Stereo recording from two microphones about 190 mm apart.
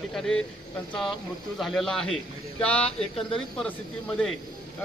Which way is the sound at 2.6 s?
5° left (ahead or behind).